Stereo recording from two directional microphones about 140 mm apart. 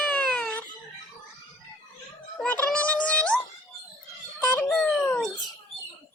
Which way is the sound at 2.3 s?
10° left (ahead or behind).